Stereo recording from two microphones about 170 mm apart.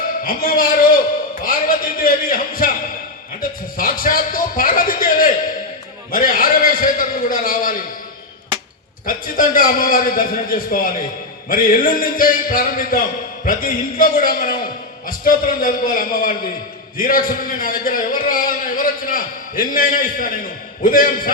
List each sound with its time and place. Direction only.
0.3 s a man's voice: 55° left (ahead or behind)
3.8 s a man's voice: 55° left (ahead or behind)
9.0 s a man's voice: 55° left (ahead or behind)